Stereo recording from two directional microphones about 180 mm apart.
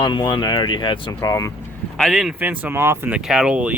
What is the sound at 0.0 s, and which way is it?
Speech, 25° left (ahead or behind).